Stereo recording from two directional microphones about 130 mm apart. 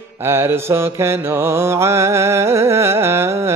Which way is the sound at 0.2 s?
20° right (ahead or behind).